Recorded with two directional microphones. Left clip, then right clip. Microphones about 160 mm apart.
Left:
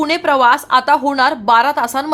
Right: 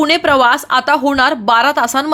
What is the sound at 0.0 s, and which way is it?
Speech, 25° right (ahead or behind).